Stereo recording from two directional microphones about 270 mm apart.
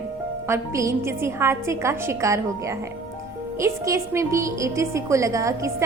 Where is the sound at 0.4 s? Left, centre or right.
Centre.